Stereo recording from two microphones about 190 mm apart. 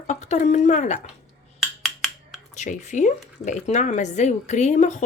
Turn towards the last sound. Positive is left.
turn(degrees=40)  # may be behind; listen again after turning